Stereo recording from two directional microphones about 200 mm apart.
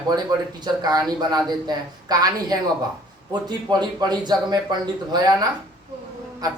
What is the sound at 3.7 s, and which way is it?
Speech, 20° right (ahead or behind).